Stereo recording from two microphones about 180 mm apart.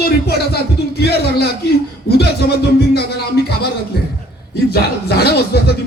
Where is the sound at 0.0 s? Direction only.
60° left (ahead or behind).